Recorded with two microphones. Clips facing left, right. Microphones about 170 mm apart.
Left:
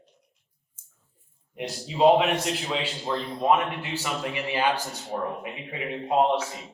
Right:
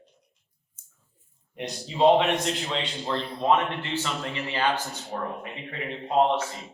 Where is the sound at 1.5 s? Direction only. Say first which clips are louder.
Left 1 dB; 5° left (ahead or behind).